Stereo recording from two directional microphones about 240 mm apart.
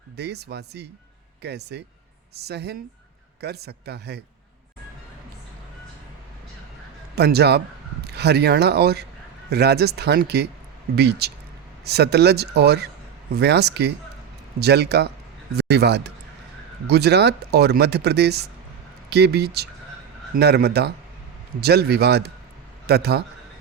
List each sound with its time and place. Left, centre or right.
0.2 s speech: right
7.2 s speech: right